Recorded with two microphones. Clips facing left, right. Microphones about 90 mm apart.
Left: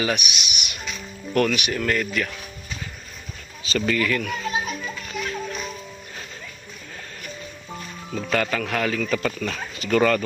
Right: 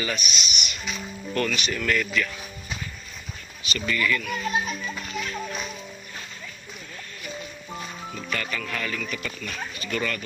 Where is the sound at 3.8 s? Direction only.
75° left (ahead or behind).